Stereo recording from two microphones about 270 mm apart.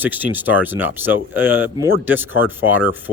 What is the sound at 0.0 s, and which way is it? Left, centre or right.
A man's voice, centre.